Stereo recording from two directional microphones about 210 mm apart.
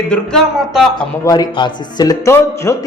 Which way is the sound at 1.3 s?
20° left (ahead or behind).